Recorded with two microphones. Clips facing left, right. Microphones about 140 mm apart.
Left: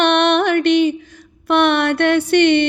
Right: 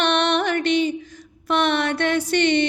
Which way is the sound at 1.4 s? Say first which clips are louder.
Left 6 dB; 60° left (ahead or behind).